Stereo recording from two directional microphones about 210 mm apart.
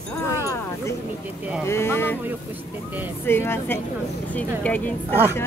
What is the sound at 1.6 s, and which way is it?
Speech, 10° left (ahead or behind).